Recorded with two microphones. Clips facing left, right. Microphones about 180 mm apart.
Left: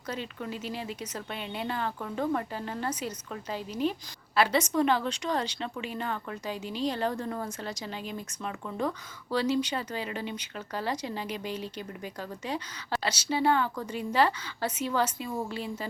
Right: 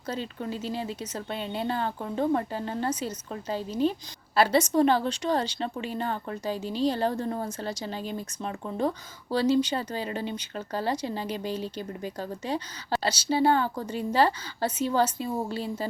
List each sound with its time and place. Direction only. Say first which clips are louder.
0.1 s a woman's voice: right 3 dB; 30° right (ahead or behind)